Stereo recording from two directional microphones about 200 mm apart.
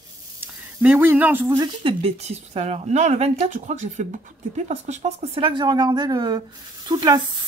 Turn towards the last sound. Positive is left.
turn(degrees=-20)  # may be behind; listen again after turning